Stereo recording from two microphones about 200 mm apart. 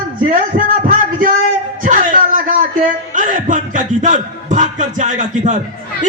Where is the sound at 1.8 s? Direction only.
40° right (ahead or behind).